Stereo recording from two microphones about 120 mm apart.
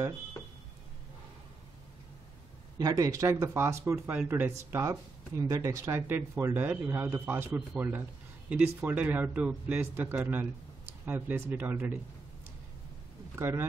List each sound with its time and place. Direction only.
2.8 s a man's voice: 30° right (ahead or behind)
13.4 s speech: 20° right (ahead or behind)